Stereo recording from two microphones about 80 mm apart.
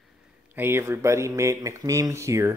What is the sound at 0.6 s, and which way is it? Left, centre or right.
Speech, right.